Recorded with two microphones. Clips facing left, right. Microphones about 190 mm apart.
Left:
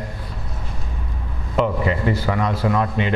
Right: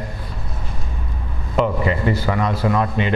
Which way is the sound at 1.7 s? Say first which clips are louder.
Right 1 dB; 20° right (ahead or behind).